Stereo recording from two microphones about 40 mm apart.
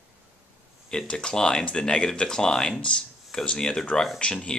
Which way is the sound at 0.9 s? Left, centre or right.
Centre.